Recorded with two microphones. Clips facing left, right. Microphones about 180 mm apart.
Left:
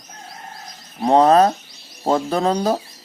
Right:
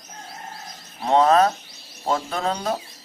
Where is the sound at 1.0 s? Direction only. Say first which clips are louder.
Left 4 dB; 35° left (ahead or behind).